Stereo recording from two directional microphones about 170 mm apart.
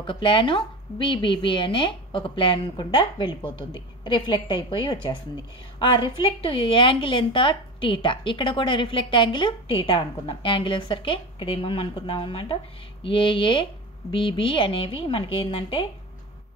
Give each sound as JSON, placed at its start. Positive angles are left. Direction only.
{"t": 0.0, "sound": "a woman's voice", "side_deg": 30}